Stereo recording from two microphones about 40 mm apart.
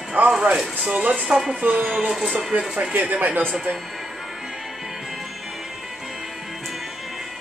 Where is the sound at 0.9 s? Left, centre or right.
Right.